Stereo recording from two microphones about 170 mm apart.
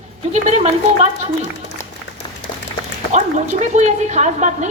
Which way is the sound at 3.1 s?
45° right (ahead or behind).